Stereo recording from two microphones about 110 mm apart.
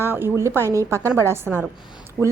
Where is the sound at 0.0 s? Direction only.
20° right (ahead or behind).